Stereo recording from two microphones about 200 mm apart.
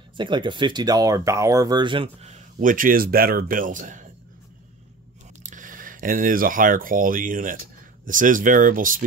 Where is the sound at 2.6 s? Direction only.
40° right (ahead or behind).